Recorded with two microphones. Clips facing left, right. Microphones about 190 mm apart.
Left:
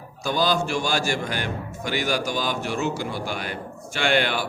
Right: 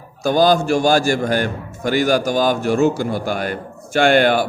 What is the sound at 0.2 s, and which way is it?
A man's voice, 45° right (ahead or behind).